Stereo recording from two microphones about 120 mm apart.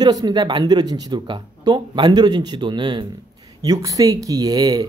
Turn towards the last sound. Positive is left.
turn(degrees=-35)  # may be behind; listen again after turning